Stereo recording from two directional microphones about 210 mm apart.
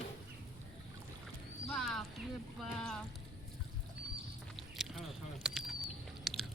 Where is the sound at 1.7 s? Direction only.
Centre (ahead or behind).